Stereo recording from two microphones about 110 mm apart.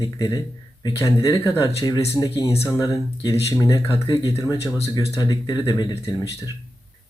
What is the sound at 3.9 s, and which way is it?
Speech, 50° left (ahead or behind).